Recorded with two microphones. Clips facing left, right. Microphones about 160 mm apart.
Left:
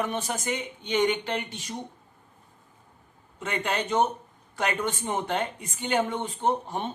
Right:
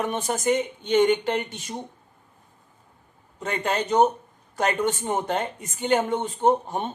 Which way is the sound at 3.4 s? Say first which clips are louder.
Right 3 dB; 40° right (ahead or behind).